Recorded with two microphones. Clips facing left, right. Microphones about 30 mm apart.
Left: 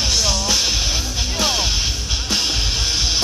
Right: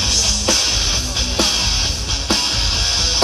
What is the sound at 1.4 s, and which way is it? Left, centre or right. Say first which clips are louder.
Music: left 2 dB; centre.